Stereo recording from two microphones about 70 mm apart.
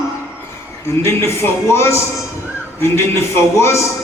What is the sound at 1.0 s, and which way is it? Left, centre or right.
Speech, left.